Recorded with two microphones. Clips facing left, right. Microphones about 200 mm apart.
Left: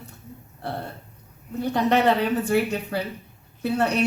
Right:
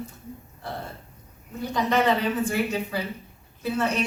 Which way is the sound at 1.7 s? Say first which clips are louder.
Left 2 dB; 65° left (ahead or behind).